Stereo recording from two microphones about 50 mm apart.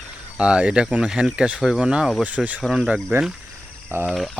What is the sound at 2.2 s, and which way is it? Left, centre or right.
Speech, right.